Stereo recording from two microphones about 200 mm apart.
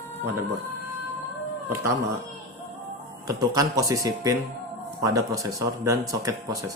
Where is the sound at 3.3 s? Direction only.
20° right (ahead or behind).